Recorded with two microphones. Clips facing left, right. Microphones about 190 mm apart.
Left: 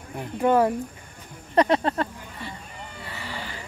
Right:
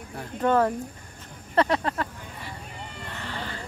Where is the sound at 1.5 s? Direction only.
20° left (ahead or behind).